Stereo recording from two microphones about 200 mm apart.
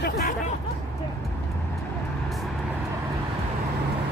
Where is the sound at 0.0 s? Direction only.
50° left (ahead or behind).